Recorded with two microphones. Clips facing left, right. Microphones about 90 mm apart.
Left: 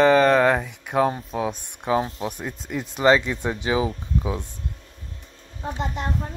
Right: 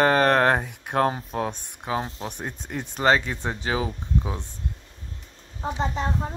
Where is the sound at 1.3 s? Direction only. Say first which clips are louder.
Left 2 dB; centre (ahead or behind).